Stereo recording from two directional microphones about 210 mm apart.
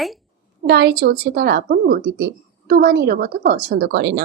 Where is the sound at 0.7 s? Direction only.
50° right (ahead or behind).